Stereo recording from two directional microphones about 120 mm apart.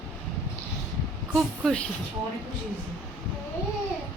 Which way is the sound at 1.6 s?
10° left (ahead or behind).